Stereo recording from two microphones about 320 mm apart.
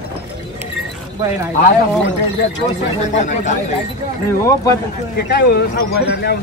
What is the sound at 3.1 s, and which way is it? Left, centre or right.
Speech, left.